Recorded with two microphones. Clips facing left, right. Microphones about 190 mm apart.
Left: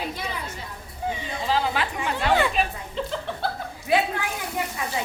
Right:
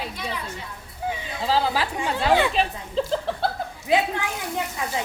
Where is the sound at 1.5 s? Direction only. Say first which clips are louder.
Right 2 dB; 35° right (ahead or behind).